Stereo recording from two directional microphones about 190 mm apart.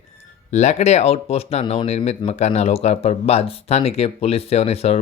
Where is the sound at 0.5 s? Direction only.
35° left (ahead or behind).